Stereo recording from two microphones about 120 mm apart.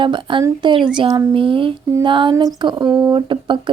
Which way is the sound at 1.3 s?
45° right (ahead or behind).